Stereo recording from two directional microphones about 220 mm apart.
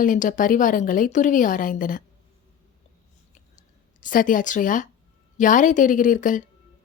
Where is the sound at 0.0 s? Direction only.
35° left (ahead or behind).